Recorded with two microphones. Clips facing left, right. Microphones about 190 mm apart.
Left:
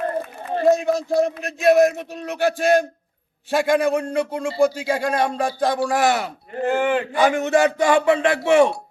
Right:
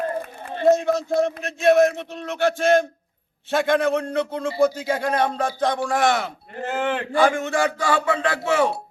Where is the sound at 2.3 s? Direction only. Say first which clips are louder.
Even; 15° left (ahead or behind).